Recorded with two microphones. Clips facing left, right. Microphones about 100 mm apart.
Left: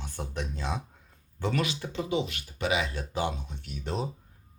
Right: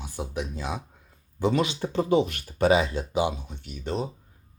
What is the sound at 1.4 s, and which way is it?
Speech, 25° right (ahead or behind).